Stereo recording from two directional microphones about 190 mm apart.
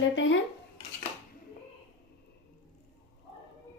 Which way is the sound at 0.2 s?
80° left.